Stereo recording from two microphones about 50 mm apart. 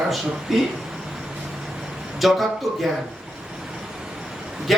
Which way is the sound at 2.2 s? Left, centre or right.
Centre.